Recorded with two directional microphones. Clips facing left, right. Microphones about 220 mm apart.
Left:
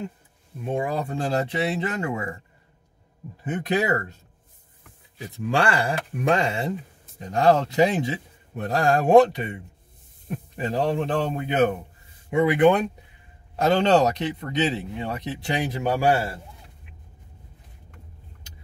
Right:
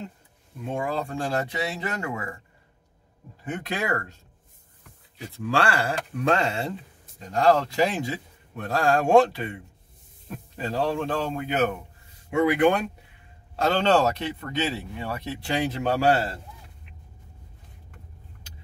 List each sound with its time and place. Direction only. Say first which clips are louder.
0.7 s a man's voice: left 2 dB; 20° left (ahead or behind)
3.4 s a man's voice: left 5 dB; 20° left (ahead or behind)
5.3 s a man's voice: left 2 dB; 20° left (ahead or behind)